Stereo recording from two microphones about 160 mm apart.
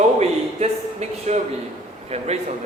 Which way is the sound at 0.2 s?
45° right (ahead or behind).